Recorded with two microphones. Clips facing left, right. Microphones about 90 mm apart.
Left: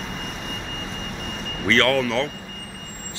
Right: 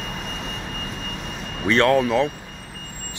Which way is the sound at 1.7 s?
20° right (ahead or behind).